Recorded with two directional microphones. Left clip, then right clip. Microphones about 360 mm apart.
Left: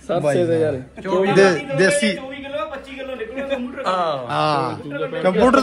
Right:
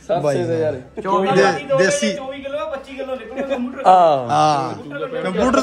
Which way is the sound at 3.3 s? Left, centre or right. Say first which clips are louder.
Right 2 dB; right.